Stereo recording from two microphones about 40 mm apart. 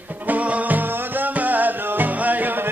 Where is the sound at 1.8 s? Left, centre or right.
Right.